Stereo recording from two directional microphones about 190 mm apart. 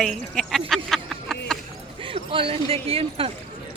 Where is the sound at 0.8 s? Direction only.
Centre (ahead or behind).